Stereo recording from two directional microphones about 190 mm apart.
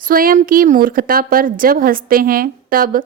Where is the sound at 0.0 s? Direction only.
50° right (ahead or behind).